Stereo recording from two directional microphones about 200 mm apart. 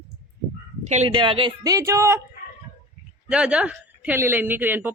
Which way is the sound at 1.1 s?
25° right (ahead or behind).